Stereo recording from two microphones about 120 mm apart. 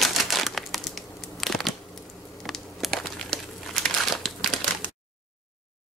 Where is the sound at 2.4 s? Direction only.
Centre (ahead or behind).